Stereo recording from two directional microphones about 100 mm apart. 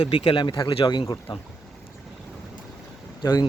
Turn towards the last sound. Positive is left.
turn(degrees=45)  # may be behind; listen again after turning